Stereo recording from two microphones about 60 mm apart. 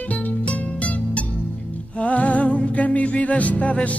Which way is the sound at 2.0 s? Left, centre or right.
Left.